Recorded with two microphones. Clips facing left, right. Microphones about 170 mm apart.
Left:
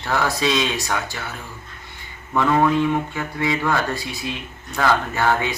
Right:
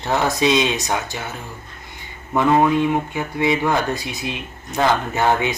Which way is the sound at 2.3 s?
20° right (ahead or behind).